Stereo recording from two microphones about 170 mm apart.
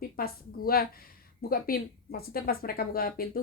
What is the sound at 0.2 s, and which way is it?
A woman's voice, 60° left (ahead or behind).